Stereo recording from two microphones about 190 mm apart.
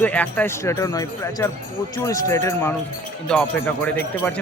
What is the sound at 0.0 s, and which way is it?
Speech, 10° left (ahead or behind).